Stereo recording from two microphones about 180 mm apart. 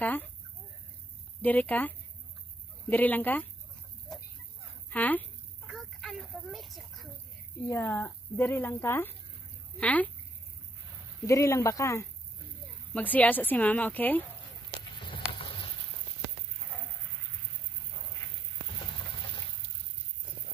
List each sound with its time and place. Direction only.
1.4 s speech: 10° left (ahead or behind)
4.8 s speech: 10° left (ahead or behind)
5.7 s a sound: centre (ahead or behind)
7.6 s speech: 15° left (ahead or behind)
11.2 s speech: 15° left (ahead or behind)
15.3 s a sound: 25° left (ahead or behind)